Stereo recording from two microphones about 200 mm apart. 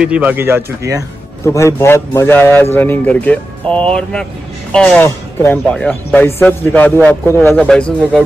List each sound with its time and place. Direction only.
0.0 s speech: 5° right (ahead or behind)
1.4 s a man's voice: 15° left (ahead or behind)